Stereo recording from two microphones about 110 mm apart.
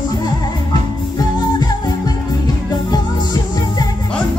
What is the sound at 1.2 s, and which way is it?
Music, 40° left (ahead or behind).